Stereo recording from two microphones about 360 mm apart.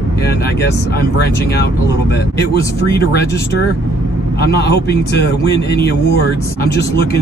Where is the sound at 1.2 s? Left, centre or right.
Left.